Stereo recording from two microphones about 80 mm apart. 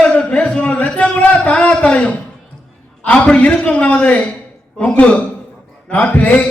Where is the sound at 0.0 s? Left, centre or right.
Centre.